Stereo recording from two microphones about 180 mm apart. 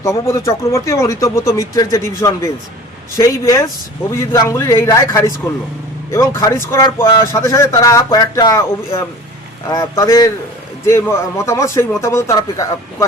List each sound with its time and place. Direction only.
0.0 s a man's voice: 15° left (ahead or behind)